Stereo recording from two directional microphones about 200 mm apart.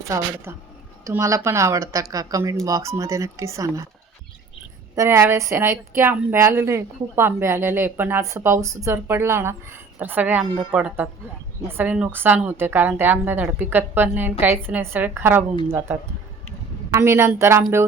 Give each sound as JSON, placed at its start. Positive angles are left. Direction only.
{"t": 0.1, "sound": "a woman's voice", "side_deg": -15}
{"t": 4.9, "sound": "a woman's voice", "side_deg": -15}
{"t": 16.9, "sound": "a woman's voice", "side_deg": -15}